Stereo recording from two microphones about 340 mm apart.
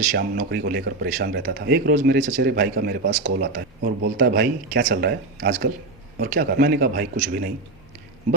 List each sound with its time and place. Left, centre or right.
0.1 s speech: right